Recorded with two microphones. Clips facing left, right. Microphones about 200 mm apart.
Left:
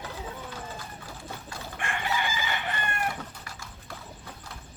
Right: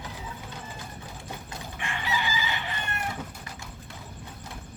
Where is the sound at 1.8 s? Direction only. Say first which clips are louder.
Left 1 dB; 50° left (ahead or behind).